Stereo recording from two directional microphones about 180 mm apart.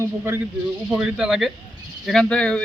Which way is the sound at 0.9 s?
5° right (ahead or behind).